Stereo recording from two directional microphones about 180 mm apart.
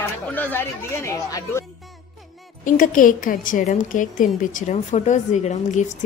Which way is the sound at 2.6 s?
50° left (ahead or behind).